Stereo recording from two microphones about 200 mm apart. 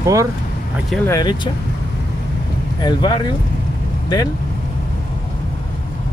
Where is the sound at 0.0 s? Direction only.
15° right (ahead or behind).